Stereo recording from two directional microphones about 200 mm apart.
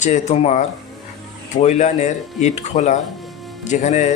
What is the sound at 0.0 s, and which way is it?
Speech, 35° left (ahead or behind).